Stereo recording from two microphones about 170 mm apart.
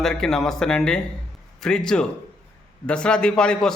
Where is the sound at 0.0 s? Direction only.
Centre (ahead or behind).